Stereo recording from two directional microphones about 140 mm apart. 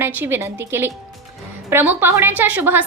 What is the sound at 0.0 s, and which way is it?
Speech, 15° right (ahead or behind).